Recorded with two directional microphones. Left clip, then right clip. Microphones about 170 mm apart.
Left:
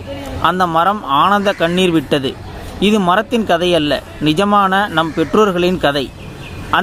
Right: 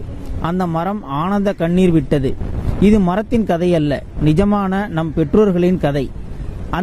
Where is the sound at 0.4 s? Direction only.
45° right (ahead or behind).